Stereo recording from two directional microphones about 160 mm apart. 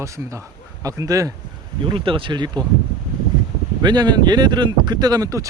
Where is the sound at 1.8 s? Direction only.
30° right (ahead or behind).